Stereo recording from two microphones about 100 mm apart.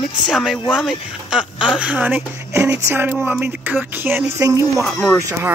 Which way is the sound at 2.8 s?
20° right (ahead or behind).